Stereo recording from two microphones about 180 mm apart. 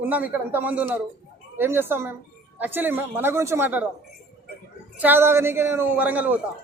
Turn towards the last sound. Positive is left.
turn(degrees=-10)  # may be behind; listen again after turning